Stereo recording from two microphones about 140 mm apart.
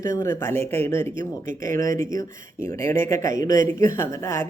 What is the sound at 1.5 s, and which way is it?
Speech, 70° right (ahead or behind).